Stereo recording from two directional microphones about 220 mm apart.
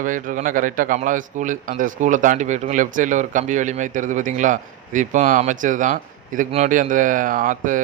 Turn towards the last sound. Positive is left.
turn(degrees=-35)  # may be behind; listen again after turning